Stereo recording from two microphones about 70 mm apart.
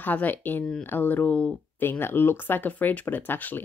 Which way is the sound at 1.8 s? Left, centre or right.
Left.